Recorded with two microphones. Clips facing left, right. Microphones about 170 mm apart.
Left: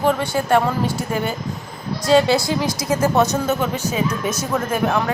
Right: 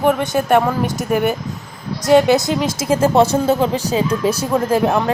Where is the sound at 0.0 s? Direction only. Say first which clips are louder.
Right 3 dB; 20° right (ahead or behind).